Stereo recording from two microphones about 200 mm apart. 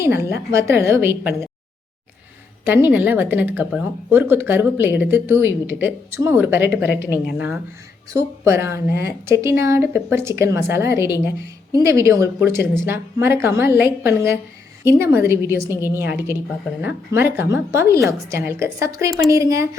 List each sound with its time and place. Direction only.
0.0 s speech: 15° right (ahead or behind)
2.6 s speech: 10° right (ahead or behind)